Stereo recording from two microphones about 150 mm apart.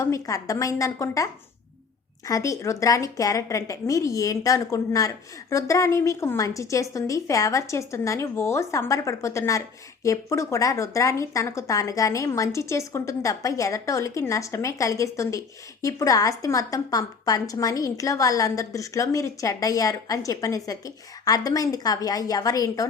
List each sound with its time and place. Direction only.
0.0 s a woman's voice: 20° left (ahead or behind)